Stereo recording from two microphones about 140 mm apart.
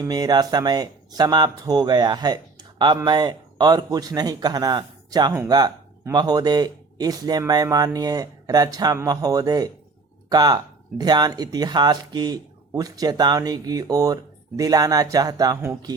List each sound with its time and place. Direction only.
0.0 s speech: 25° right (ahead or behind)